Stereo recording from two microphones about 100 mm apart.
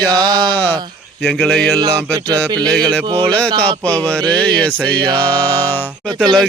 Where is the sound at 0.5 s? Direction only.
15° left (ahead or behind).